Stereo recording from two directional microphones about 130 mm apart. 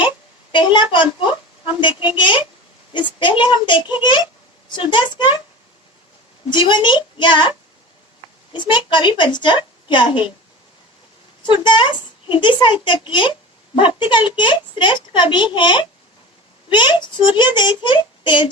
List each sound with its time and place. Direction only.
0.5 s a woman's voice: 35° left (ahead or behind)
6.5 s a woman's voice: 35° left (ahead or behind)
8.5 s a woman's voice: 35° left (ahead or behind)
11.4 s a woman's voice: 35° left (ahead or behind)